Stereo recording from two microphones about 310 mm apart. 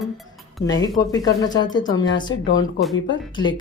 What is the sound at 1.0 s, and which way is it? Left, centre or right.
Speech, centre.